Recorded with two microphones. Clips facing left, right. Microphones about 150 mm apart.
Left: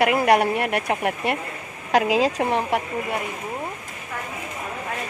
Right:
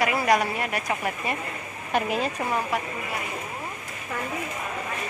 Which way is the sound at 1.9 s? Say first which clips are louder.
Left 6 dB; 90° left.